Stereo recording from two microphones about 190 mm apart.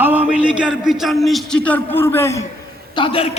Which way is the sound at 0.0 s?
10° right (ahead or behind).